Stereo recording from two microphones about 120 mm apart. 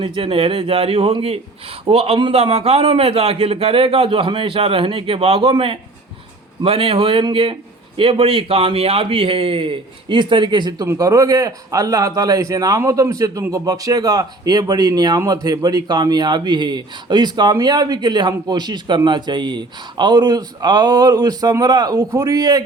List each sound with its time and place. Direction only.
0.0 s a man's voice: 45° right (ahead or behind); by 22.6 s 30° right (ahead or behind)